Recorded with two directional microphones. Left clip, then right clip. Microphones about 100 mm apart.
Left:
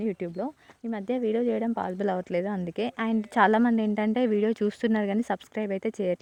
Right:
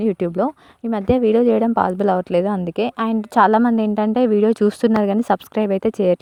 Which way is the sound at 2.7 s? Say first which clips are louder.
Right 9 dB; 35° right (ahead or behind).